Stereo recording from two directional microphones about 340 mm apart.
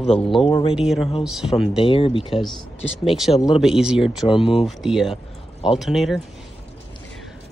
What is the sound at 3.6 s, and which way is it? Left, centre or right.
Speech, centre.